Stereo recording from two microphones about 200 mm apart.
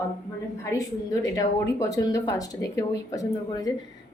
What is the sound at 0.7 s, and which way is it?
A woman's voice, 15° left (ahead or behind).